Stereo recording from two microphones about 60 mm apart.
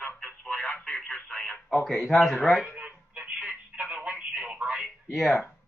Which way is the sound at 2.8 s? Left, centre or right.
Centre.